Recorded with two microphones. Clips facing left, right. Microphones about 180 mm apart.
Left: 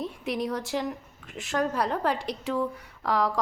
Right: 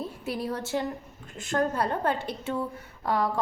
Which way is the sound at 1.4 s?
Centre (ahead or behind).